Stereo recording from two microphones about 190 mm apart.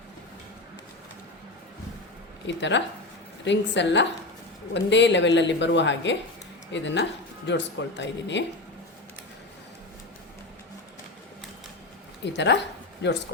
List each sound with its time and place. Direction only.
2.5 s speech: 70° left (ahead or behind)
12.2 s a woman's voice: 65° left (ahead or behind)